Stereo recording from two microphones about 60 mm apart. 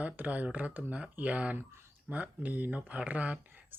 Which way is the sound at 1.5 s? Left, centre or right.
Right.